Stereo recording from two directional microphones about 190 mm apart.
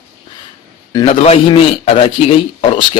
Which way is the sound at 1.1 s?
30° left (ahead or behind).